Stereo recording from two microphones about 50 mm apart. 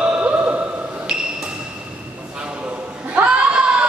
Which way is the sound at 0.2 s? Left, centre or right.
Right.